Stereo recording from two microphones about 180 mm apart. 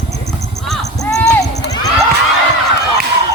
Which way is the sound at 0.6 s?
Centre (ahead or behind).